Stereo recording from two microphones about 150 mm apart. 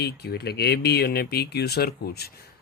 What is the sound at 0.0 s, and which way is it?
Speech, 90° left.